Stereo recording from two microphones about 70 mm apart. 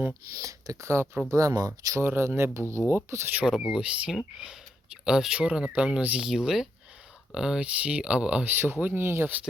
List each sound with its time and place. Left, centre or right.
0.3 s speech: right
2.0 s speech: right
3.4 s speech: centre
6.0 s speech: right
6.2 s speech: centre
8.4 s speech: right